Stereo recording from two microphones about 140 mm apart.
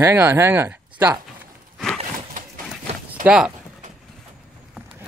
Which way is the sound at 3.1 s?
10° right (ahead or behind).